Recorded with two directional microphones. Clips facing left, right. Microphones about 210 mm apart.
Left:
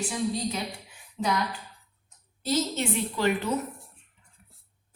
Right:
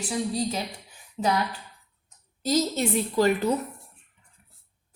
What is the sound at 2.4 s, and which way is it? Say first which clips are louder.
Speech: right 3 dB; 40° right (ahead or behind).